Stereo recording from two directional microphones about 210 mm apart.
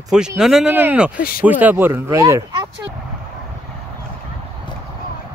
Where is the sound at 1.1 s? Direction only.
45° left (ahead or behind).